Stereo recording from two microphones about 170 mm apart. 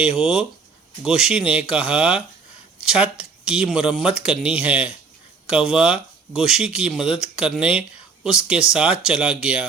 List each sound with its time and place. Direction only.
0.0 s speech: 5° right (ahead or behind)